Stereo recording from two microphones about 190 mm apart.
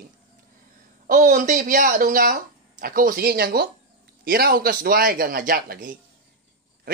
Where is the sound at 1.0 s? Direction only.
45° right (ahead or behind).